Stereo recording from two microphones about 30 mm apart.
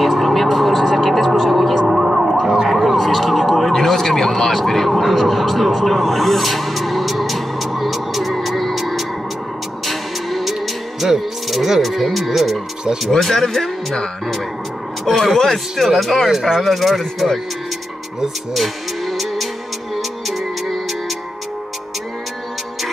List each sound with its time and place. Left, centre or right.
0.0 s music: centre
2.7 s emergency vehicle: centre
3.7 s vehicle: centre
9.8 s music: centre
10.5 s music: centre
13.2 s speech: centre
15.0 s speech: centre
15.8 s speech: centre
16.3 s speech: centre
16.6 s speech: centre
18.5 s music: centre